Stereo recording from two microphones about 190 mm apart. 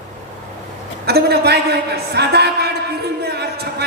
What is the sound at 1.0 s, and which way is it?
A man's voice, 55° right (ahead or behind).